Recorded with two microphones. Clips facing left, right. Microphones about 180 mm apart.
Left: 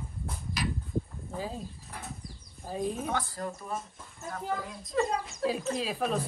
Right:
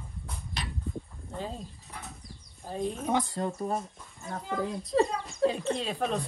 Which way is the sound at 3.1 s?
20° right (ahead or behind).